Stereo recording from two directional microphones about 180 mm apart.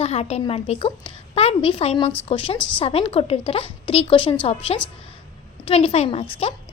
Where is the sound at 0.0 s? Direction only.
35° left (ahead or behind).